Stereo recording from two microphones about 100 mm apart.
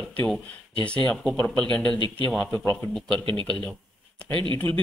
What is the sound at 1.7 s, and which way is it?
A man's voice, 10° left (ahead or behind).